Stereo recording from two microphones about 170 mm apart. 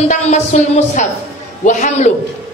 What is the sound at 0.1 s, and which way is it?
A woman's voice, 40° left (ahead or behind).